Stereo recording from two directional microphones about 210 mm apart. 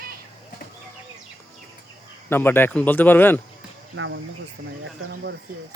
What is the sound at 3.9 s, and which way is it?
Speech, 65° right (ahead or behind).